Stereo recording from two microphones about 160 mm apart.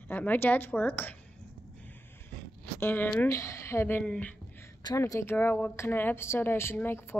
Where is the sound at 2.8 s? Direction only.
10° left (ahead or behind).